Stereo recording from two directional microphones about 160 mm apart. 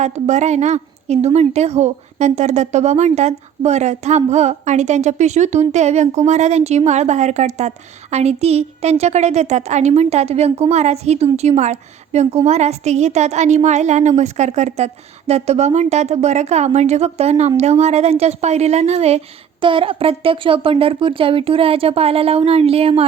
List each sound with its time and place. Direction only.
0.0 s a woman's voice: 45° right (ahead or behind)